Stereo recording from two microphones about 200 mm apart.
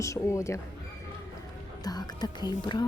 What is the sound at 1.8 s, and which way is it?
Speech, 20° left (ahead or behind).